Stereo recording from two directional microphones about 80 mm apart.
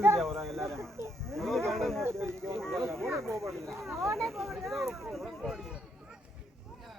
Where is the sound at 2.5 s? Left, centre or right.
Centre.